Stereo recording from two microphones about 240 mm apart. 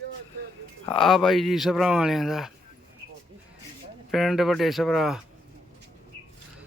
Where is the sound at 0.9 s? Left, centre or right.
Centre.